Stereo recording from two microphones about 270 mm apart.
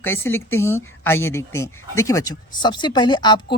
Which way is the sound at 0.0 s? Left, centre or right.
Centre.